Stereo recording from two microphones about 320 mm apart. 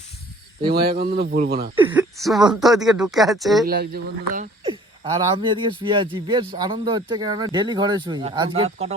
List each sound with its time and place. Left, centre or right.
0.7 s a man's voice: right
1.7 s speech: centre
3.7 s a man's voice: right
4.6 s speech: centre